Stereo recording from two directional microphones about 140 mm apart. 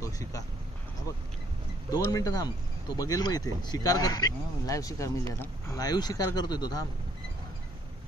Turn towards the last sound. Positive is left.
turn(degrees=30)  # may be behind; listen again after turning